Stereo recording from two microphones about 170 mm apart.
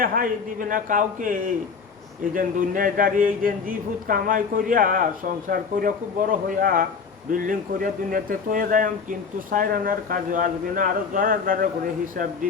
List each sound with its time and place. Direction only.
0.0 s speech: 55° right (ahead or behind)